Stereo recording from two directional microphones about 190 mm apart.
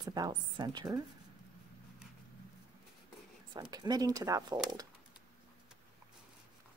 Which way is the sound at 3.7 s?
20° right (ahead or behind).